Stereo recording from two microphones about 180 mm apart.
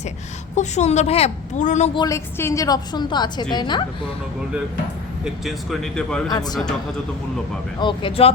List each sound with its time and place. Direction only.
0.5 s a woman's voice: 40° left (ahead or behind)
2.0 s a woman's voice: 15° left (ahead or behind)
5.2 s speech: centre (ahead or behind)
6.2 s a woman's voice: 20° left (ahead or behind)
7.8 s a woman's voice: 30° left (ahead or behind)